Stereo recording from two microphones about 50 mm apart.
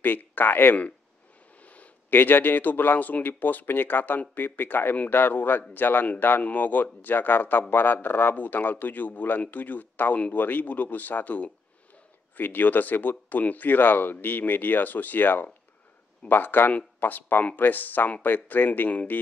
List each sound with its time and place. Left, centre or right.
0.0 s speech: left
1.6 s a man's voice: left